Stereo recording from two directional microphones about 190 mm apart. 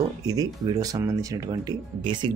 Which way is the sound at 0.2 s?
20° right (ahead or behind).